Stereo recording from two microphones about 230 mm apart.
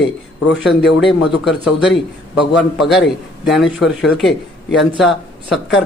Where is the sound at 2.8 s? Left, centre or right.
Centre.